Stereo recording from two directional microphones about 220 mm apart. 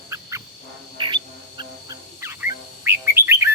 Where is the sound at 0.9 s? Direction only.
20° right (ahead or behind).